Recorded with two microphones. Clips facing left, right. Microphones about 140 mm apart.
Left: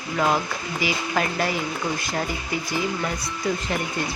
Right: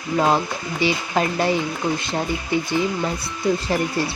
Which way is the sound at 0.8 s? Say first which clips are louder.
Right 4 dB; 30° right (ahead or behind).